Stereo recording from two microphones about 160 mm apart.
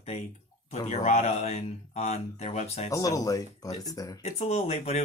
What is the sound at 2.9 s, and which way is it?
Speech, 20° left (ahead or behind).